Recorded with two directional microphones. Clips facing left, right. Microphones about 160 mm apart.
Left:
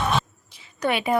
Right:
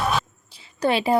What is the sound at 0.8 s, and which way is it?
Speech, 30° right (ahead or behind).